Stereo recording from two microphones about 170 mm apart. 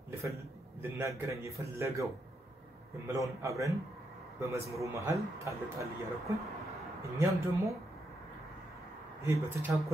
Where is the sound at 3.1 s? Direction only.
20° right (ahead or behind).